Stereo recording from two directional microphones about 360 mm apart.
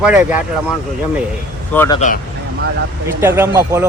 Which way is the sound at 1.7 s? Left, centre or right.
Centre.